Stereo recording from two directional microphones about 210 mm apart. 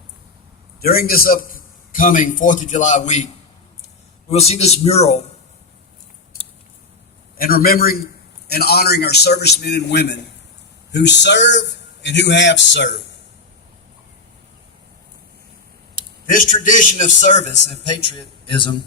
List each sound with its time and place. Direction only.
0.8 s a man's voice: 45° left (ahead or behind)
4.3 s a man's voice: 30° left (ahead or behind)
7.3 s a man's voice: 45° left (ahead or behind)
16.2 s a man's voice: 40° left (ahead or behind); by 18.7 s 25° left (ahead or behind)